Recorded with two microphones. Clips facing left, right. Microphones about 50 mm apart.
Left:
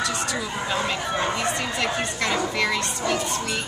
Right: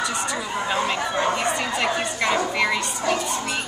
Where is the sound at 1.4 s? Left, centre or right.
Centre.